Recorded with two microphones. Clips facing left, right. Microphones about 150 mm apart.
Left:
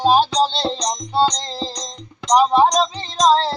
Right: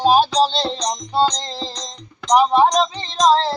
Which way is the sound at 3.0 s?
5° left (ahead or behind).